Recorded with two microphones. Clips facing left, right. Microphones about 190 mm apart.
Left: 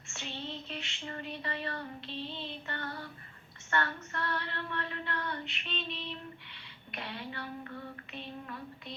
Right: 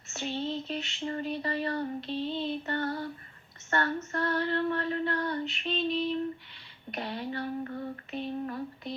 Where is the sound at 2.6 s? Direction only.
40° right (ahead or behind).